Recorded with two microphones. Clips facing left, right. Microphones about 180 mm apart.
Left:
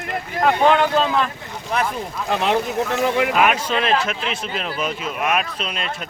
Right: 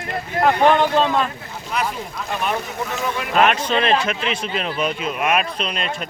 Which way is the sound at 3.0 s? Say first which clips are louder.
Left 8 dB; 75° left (ahead or behind).